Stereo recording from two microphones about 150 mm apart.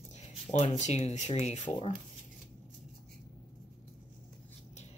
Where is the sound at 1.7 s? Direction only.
25° left (ahead or behind).